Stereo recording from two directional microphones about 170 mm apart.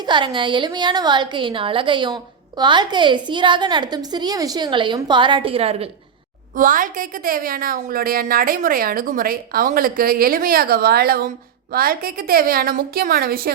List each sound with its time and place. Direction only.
0.0 s a woman's voice: 25° right (ahead or behind)
6.6 s a woman's voice: 50° right (ahead or behind)